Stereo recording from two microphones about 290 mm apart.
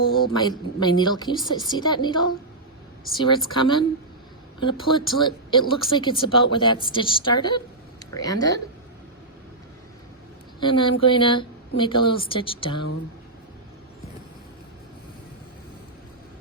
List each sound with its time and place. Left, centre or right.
0.3 s speech: centre
3.2 s speech: centre
10.6 s speech: centre